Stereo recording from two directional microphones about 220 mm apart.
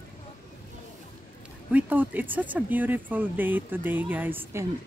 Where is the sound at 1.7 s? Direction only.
5° right (ahead or behind).